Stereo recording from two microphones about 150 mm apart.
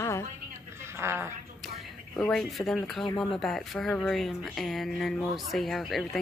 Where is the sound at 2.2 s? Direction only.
5° left (ahead or behind).